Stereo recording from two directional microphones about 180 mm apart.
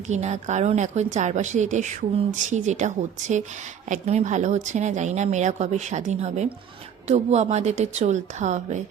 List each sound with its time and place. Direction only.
0.1 s a woman's voice: 40° right (ahead or behind)